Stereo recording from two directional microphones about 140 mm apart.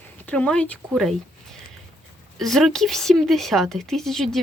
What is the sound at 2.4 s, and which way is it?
Speech, centre (ahead or behind).